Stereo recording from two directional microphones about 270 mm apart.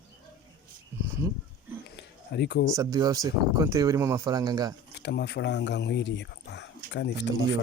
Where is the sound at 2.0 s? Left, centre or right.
Left.